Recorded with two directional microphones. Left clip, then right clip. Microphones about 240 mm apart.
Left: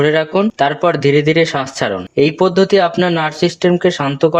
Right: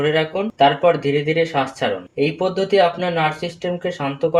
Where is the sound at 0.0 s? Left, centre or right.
Left.